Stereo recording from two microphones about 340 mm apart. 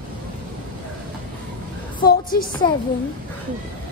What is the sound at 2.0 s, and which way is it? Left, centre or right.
Speech, left.